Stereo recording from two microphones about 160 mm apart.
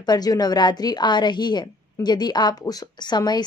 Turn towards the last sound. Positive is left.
turn(degrees=25)  # may be behind; listen again after turning